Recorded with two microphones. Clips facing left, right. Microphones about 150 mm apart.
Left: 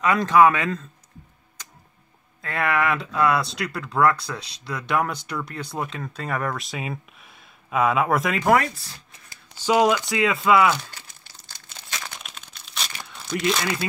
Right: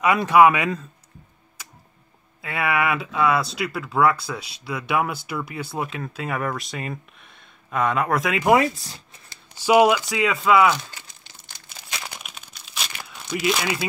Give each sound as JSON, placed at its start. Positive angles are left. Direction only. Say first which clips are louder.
{"t": 0.0, "sound": "speech", "louder": "right 1 dB", "side_deg": -10}
{"t": 1.6, "sound": "tick-tock", "louder": "right 1 dB", "side_deg": -10}
{"t": 2.4, "sound": "speech", "louder": "even", "side_deg": -5}
{"t": 8.7, "sound": "speech", "louder": "right 3 dB", "side_deg": -20}
{"t": 9.6, "sound": "speech", "louder": "right 3 dB", "side_deg": -10}
{"t": 10.7, "sound": "speech", "louder": "even", "side_deg": -10}
{"t": 11.4, "sound": "crumpling", "louder": "even", "side_deg": -15}